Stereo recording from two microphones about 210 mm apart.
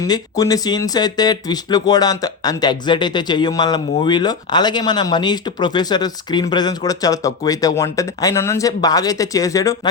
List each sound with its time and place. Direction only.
0.0 s speech: 15° left (ahead or behind)